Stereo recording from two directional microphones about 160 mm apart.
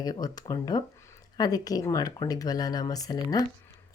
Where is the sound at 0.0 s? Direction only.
25° left (ahead or behind).